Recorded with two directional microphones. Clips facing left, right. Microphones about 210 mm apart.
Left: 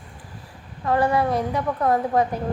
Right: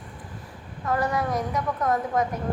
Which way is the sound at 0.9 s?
30° left (ahead or behind).